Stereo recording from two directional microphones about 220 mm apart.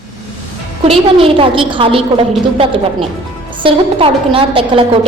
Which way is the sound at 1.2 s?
25° right (ahead or behind).